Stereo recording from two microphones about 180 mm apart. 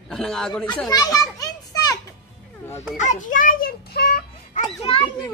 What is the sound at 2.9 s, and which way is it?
A child's voice, 45° left (ahead or behind).